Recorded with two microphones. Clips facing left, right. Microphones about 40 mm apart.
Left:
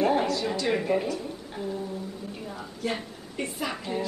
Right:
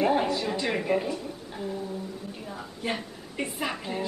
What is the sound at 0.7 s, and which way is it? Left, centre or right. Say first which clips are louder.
Speech: left 1 dB; centre.